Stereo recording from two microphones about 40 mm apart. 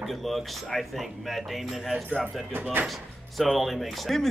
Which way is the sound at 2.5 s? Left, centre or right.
Right.